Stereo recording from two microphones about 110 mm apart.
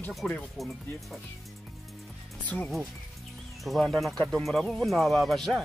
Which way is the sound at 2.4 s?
15° left (ahead or behind).